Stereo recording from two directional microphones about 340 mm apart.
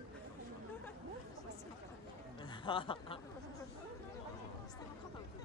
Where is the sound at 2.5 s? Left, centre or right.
Centre.